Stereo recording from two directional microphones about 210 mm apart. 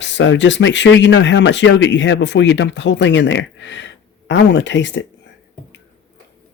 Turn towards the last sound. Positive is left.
turn(degrees=60)  # may be behind; listen again after turning